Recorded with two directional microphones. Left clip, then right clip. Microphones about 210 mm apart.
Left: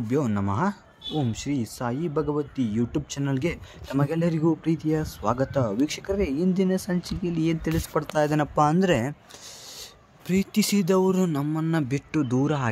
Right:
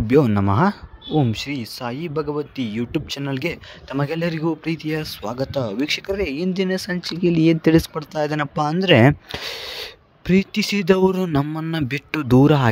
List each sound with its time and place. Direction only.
0.1 s speech: 35° right (ahead or behind)